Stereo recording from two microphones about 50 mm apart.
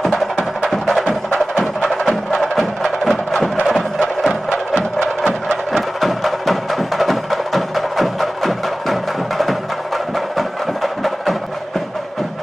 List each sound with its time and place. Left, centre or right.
0.7 s music: centre
2.3 s music: centre
5.0 s music: centre
5.7 s music: centre